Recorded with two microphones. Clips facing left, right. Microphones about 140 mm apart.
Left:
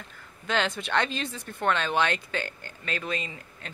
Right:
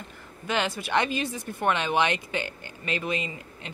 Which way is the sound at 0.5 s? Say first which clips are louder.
Even; 10° right (ahead or behind).